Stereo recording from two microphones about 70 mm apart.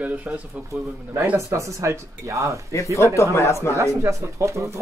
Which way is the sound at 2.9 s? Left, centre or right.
Left.